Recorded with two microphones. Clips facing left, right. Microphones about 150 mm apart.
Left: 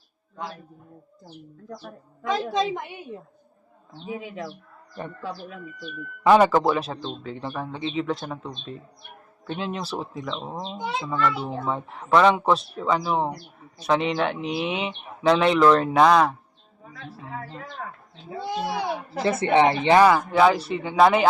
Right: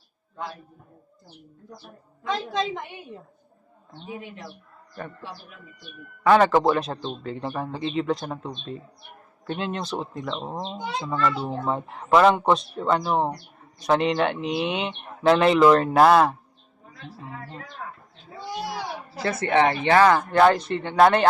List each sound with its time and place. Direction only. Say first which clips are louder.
2.5 s speech: left 2 dB; 10° left (ahead or behind)
6.2 s speech: left 1 dB; 10° left (ahead or behind)
6.7 s a child's voice: right 1 dB; centre (ahead or behind)
18.4 s speech: left 4 dB; 20° left (ahead or behind)
20.1 s speech: even; 5° left (ahead or behind)